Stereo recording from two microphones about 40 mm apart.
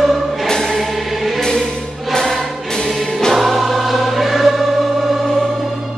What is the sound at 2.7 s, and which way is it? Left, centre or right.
Music, centre.